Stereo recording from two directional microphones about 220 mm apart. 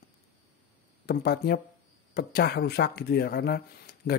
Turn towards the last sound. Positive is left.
turn(degrees=45)  # may be behind; listen again after turning